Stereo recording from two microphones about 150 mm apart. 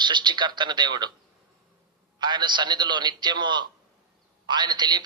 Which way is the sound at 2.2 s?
30° right (ahead or behind).